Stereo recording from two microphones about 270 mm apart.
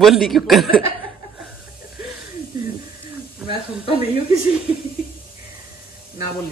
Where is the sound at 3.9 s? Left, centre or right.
Left.